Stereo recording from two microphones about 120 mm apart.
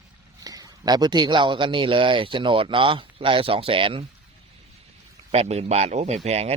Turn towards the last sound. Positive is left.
turn(degrees=-65)  # may be behind; listen again after turning